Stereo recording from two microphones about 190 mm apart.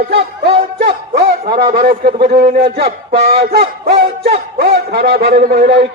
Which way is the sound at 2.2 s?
55° right (ahead or behind).